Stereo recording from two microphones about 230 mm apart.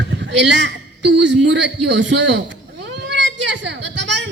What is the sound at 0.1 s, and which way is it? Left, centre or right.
A man's voice, right.